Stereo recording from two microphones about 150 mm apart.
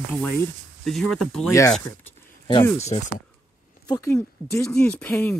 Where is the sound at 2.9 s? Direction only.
45° left (ahead or behind).